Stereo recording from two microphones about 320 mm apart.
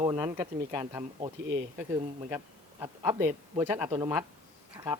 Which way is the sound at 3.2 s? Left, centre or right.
Right.